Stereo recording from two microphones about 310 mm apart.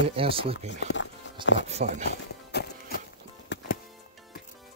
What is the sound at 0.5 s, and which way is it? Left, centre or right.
Speech, left.